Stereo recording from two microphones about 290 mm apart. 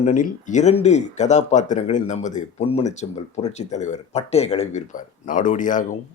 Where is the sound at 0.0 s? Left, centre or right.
Left.